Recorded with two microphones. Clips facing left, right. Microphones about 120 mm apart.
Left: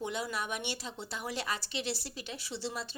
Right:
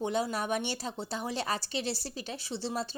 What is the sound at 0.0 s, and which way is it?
Speech, 35° right (ahead or behind).